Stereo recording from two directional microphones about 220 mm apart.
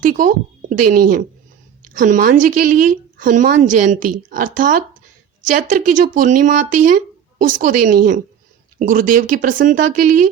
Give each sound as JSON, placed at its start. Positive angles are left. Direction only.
{"t": 0.0, "sound": "speech", "side_deg": -35}